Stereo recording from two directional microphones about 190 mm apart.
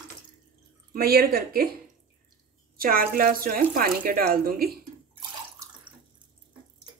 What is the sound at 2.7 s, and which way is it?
Speech, 50° right (ahead or behind).